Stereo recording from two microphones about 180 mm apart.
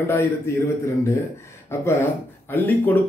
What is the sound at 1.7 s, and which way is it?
Speech, 15° left (ahead or behind).